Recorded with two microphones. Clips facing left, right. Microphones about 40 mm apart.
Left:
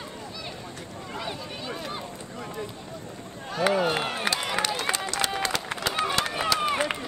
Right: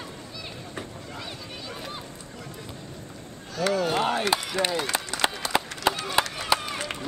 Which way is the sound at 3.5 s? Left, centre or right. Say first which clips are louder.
Left 1 dB; left.